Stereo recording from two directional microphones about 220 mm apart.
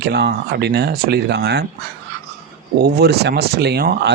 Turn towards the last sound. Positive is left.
turn(degrees=-45)  # may be behind; listen again after turning